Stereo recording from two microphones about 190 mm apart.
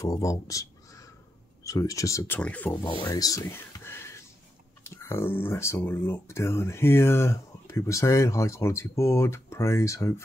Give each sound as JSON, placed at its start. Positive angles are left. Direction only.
{"t": 0.0, "sound": "speech", "side_deg": 15}
{"t": 2.9, "sound": "a sound", "side_deg": 20}
{"t": 4.8, "sound": "speech", "side_deg": 15}